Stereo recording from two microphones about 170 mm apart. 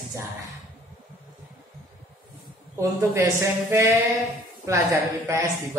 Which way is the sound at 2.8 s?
20° right (ahead or behind).